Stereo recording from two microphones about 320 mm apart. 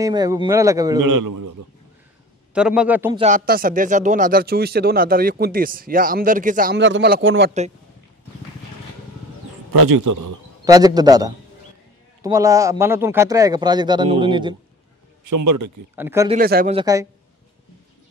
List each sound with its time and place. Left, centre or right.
0.0 s a man's voice: centre
1.0 s a man's voice: right
2.5 s a man's voice: centre
3.2 s speech: right
9.7 s a man's voice: right
10.6 s a man's voice: centre
15.2 s speech: right
16.0 s a man's voice: centre
16.3 s speech: right
16.7 s a man's voice: centre